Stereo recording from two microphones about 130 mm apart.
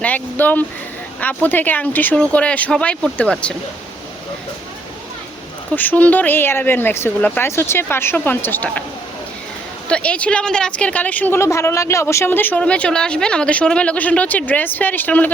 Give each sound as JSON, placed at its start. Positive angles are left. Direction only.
{"t": 0.0, "sound": "a woman's voice", "side_deg": 10}
{"t": 5.7, "sound": "a woman's voice", "side_deg": 15}
{"t": 9.9, "sound": "a woman's voice", "side_deg": 10}